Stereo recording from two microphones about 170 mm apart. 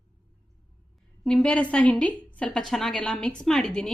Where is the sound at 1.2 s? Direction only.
5° left (ahead or behind).